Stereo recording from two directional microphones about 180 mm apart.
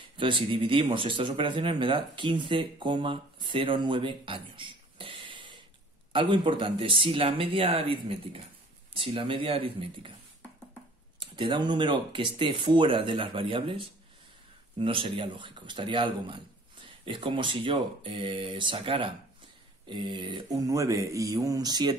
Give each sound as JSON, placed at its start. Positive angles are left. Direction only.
{"t": 0.2, "sound": "a man's voice", "side_deg": -30}
{"t": 11.1, "sound": "a man's voice", "side_deg": -25}